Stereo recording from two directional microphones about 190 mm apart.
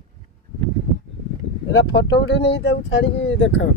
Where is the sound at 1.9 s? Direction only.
65° left (ahead or behind).